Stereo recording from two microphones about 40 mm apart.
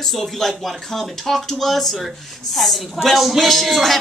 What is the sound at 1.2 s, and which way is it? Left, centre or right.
Speech, centre.